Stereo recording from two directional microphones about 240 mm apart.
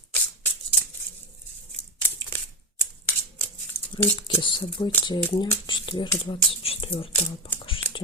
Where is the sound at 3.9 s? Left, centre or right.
Left.